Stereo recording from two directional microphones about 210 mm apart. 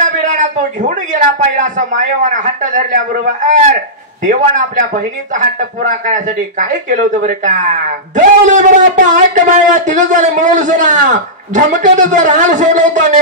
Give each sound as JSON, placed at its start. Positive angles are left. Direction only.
{"t": 0.0, "sound": "speech", "side_deg": -35}